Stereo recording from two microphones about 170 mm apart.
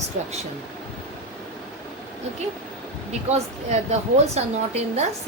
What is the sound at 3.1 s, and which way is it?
A woman's voice, 40° right (ahead or behind).